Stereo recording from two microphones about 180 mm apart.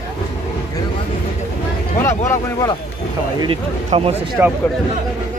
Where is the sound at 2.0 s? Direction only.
15° left (ahead or behind).